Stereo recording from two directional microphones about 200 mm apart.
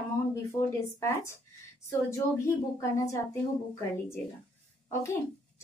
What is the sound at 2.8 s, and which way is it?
A woman's voice, 15° left (ahead or behind).